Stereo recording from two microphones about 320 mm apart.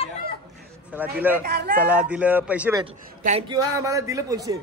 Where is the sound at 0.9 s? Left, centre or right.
Centre.